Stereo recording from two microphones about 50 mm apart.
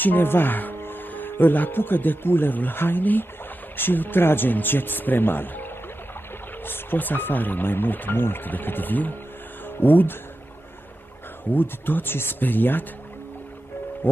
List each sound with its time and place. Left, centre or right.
0.0 s speech: left
11.4 s speech: left